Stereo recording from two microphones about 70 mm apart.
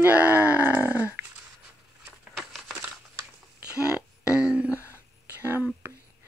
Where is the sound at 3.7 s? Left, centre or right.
Centre.